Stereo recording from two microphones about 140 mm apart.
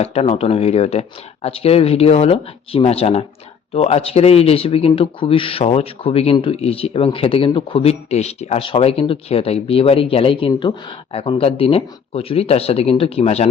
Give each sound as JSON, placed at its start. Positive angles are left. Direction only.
{"t": 0.0, "sound": "speech", "side_deg": 45}